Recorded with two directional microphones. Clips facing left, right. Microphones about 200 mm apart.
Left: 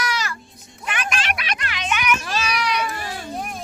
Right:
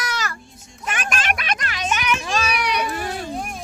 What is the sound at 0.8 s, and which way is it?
Children playing, 45° right (ahead or behind).